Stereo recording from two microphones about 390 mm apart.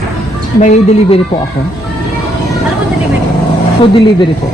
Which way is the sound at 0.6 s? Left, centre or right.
Centre.